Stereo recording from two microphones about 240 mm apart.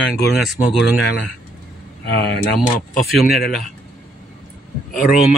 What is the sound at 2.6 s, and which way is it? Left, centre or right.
Speech, centre.